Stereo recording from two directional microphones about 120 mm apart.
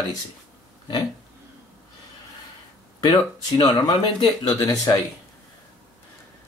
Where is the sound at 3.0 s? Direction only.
35° left (ahead or behind).